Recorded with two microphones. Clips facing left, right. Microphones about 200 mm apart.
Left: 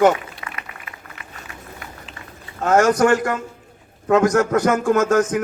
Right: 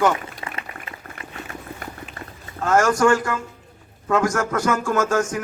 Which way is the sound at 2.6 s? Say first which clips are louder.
Left 2 dB; 20° left (ahead or behind).